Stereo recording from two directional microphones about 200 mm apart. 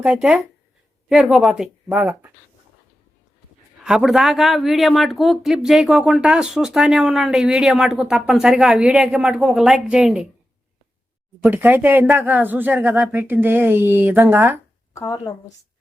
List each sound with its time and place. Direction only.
0.0 s speech: 5° right (ahead or behind)
3.8 s speech: 5° right (ahead or behind)
11.4 s speech: 10° right (ahead or behind)
14.9 s a woman's voice: 15° left (ahead or behind)